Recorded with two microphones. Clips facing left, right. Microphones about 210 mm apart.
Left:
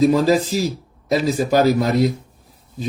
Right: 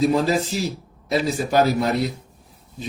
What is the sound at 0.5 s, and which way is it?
Speech, 40° left (ahead or behind).